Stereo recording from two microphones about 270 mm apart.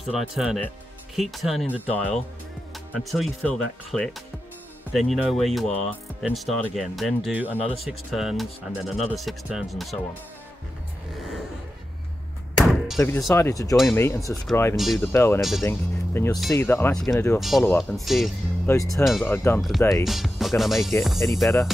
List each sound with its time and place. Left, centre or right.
0.0 s speech: centre
5.7 s speech: left
6.2 s speech: centre
12.5 s speech: centre
17.4 s speech: centre